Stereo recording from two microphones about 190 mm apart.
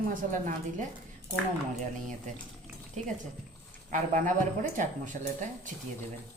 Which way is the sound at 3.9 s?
40° right (ahead or behind).